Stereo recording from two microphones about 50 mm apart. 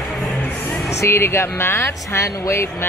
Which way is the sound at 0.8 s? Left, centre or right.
Left.